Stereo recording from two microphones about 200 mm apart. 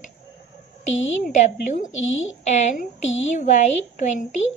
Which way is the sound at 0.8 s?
40° left (ahead or behind).